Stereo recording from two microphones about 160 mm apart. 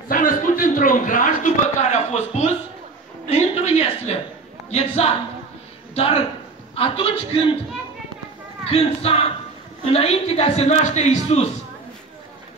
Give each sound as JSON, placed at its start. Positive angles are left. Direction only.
{"t": 0.1, "sound": "a sound", "side_deg": 60}
{"t": 4.6, "sound": "a man's voice", "side_deg": 40}
{"t": 8.6, "sound": "a man's voice", "side_deg": 40}